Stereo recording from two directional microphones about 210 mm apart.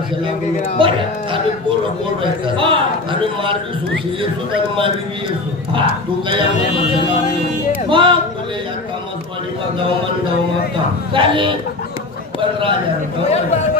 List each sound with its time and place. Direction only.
0.7 s a man's voice: 25° right (ahead or behind)
2.4 s a man's voice: 25° right (ahead or behind)
5.7 s a man's voice: 25° right (ahead or behind)
7.9 s a man's voice: 25° right (ahead or behind)
11.1 s a man's voice: 25° right (ahead or behind)
12.4 s a sound: 25° right (ahead or behind)